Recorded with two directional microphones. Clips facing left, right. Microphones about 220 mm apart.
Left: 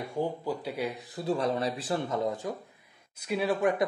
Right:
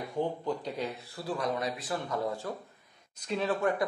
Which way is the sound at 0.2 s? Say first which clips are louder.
Even; 10° left (ahead or behind).